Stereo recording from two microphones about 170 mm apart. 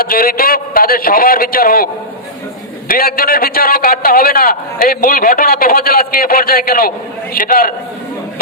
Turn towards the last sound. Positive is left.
turn(degrees=55)  # may be behind; listen again after turning